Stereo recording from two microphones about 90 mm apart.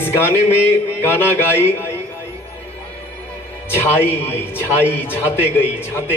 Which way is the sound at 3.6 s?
25° left (ahead or behind).